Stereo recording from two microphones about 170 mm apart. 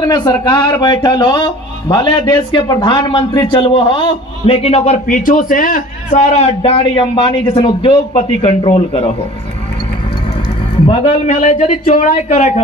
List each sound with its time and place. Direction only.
0.0 s a man's voice: 25° left (ahead or behind)
11.3 s speech: 45° left (ahead or behind)